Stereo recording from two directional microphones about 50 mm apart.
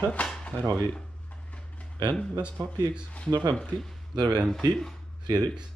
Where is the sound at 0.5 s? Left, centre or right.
Right.